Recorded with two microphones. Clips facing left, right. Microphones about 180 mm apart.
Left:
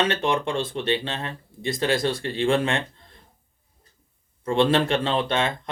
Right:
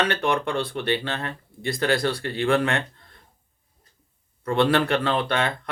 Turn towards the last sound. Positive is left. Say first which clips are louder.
# left 1 dB
turn(degrees=25)  # may be behind; listen again after turning